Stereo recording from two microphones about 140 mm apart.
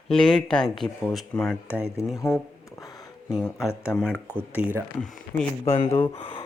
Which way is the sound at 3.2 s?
Centre (ahead or behind).